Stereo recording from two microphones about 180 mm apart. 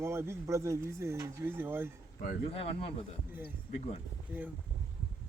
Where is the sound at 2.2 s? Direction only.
35° left (ahead or behind).